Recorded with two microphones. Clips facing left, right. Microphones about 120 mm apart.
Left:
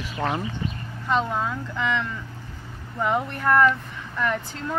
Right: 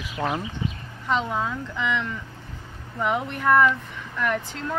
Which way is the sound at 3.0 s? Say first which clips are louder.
Left 1 dB; 5° right (ahead or behind).